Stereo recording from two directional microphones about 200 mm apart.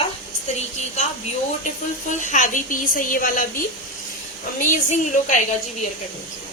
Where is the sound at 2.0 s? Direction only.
40° left (ahead or behind).